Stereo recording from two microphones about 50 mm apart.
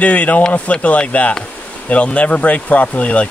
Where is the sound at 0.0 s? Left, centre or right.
Left.